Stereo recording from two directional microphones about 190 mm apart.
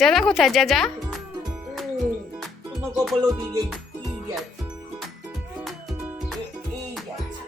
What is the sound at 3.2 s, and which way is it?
Music, 20° right (ahead or behind).